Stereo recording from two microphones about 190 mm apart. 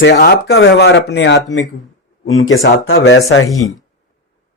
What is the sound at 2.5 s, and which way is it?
Speech, 90° left.